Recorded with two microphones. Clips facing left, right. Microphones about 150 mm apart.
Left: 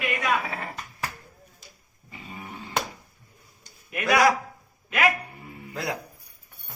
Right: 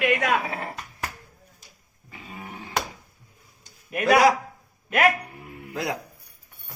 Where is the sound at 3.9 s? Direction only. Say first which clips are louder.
Right 4 dB; 35° right (ahead or behind).